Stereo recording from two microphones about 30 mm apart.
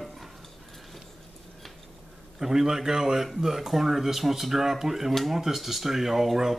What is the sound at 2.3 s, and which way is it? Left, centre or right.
Speech, centre.